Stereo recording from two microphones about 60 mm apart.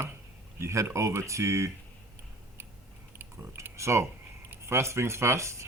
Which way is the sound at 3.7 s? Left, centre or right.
Right.